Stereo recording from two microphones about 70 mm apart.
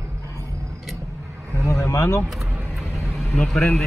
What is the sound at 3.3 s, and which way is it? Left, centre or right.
Speech, centre.